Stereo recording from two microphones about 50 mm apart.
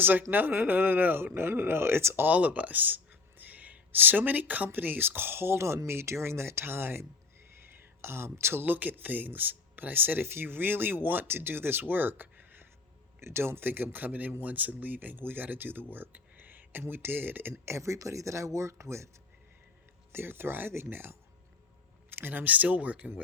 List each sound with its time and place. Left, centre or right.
0.0 s speech: right
2.2 s speech: right
8.0 s speech: right
8.6 s speech: right
13.1 s speech: right
16.3 s a sound: right
16.9 s speech: right
17.5 s speech: right
20.1 s speech: right